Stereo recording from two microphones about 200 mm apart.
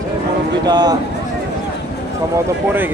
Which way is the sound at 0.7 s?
20° right (ahead or behind).